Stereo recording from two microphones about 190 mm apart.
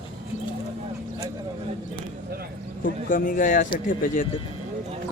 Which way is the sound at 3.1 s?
50° left (ahead or behind).